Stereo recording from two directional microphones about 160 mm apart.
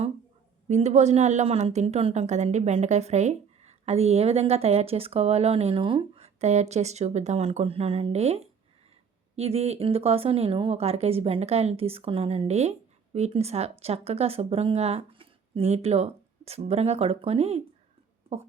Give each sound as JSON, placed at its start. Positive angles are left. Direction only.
{"t": 0.7, "sound": "a woman's voice", "side_deg": -45}